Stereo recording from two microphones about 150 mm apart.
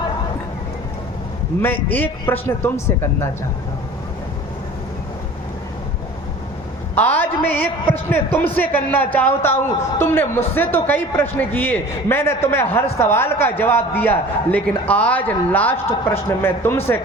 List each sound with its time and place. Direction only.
1.6 s a man's voice: 15° left (ahead or behind)
6.9 s a man's voice: 10° left (ahead or behind)